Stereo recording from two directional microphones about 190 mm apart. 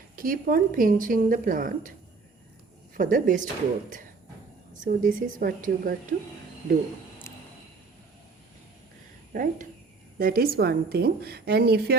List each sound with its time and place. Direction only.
0.2 s speech: 50° right (ahead or behind)
2.9 s speech: 45° right (ahead or behind)
4.7 s speech: 45° right (ahead or behind)
7.3 s a sound: 15° left (ahead or behind)
9.3 s a woman's voice: 45° right (ahead or behind)